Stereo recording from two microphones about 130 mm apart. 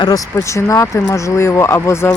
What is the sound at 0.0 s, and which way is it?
Speech, 25° left (ahead or behind).